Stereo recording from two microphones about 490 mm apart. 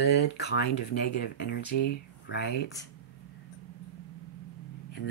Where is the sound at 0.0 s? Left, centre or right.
Left.